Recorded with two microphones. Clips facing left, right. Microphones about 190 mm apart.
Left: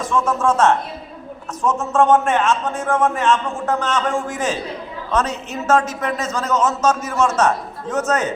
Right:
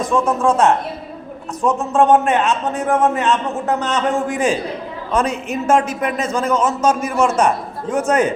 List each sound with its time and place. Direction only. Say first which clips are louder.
0.0 s a man's voice: right 2 dB; 15° right (ahead or behind)